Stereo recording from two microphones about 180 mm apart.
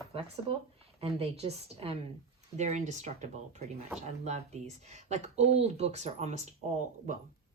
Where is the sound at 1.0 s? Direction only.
35° right (ahead or behind).